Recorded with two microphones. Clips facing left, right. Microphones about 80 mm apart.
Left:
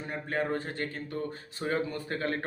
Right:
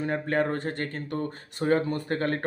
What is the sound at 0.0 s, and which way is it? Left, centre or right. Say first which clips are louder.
Speech: right 6 dB; right.